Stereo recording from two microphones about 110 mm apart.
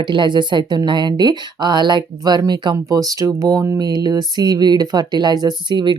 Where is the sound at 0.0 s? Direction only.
45° right (ahead or behind).